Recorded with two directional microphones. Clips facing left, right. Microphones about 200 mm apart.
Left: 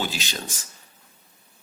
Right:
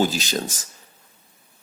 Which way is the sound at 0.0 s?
40° right (ahead or behind).